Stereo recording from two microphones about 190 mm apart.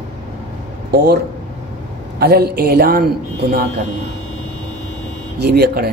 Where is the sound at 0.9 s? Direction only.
60° right (ahead or behind).